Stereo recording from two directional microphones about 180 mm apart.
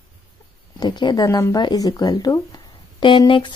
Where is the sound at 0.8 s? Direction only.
25° left (ahead or behind).